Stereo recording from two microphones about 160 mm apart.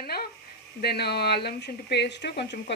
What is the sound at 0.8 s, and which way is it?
Speech, 90° left.